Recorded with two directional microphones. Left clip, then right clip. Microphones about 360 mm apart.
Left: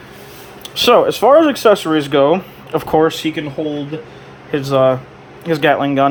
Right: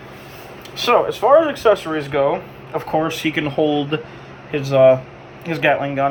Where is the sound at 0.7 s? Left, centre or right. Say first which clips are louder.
Left 5 dB; left.